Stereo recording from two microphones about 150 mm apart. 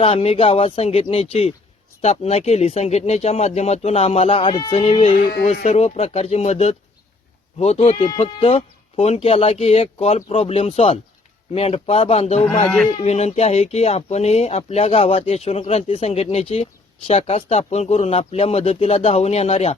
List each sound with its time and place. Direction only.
0.0 s speech: 40° left (ahead or behind)
4.8 s speech: 45° left (ahead or behind)
12.6 s speech: 5° left (ahead or behind)
12.9 s speech: 45° left (ahead or behind)